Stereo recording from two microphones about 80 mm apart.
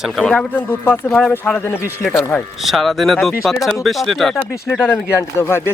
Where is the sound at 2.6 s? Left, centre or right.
Centre.